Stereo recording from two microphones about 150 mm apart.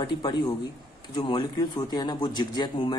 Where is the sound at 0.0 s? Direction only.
30° left (ahead or behind).